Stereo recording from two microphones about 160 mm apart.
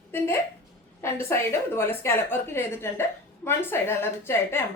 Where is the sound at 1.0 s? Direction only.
15° left (ahead or behind).